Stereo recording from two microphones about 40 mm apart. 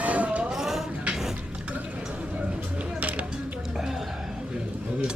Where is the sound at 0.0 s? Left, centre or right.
Right.